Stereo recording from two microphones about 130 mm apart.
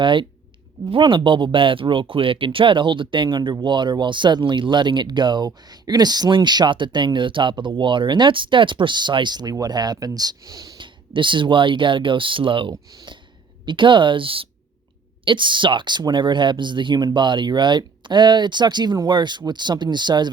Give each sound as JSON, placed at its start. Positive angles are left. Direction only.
{"t": 0.0, "sound": "speech", "side_deg": -40}
{"t": 12.7, "sound": "speech", "side_deg": -30}